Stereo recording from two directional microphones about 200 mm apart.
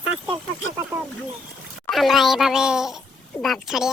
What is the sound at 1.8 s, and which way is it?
A child's voice, centre (ahead or behind).